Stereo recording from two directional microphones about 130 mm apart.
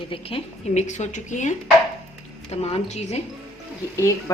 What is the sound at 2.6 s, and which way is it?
Speech, 55° left (ahead or behind).